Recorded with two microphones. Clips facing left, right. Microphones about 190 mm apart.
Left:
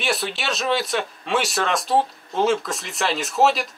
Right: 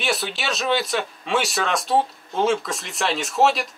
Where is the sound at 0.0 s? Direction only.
Centre (ahead or behind).